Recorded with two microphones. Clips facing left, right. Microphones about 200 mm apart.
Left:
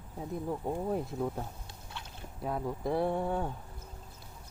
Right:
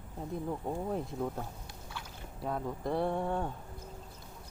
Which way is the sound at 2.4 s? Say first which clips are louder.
Left 1 dB; 5° left (ahead or behind).